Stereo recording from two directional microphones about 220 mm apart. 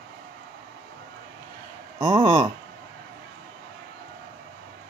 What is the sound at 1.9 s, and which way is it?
Speech, 20° right (ahead or behind).